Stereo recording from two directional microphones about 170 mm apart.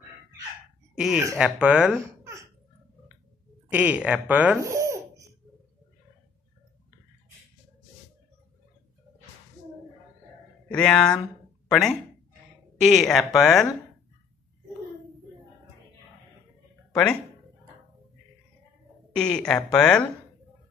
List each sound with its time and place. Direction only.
0.9 s speech: 5° right (ahead or behind)
3.7 s speech: 10° right (ahead or behind)
10.7 s speech: 5° left (ahead or behind)
16.9 s speech: 5° left (ahead or behind)
19.1 s speech: 5° left (ahead or behind)